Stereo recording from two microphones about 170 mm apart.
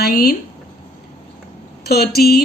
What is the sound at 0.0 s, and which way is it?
Speech, 60° left (ahead or behind).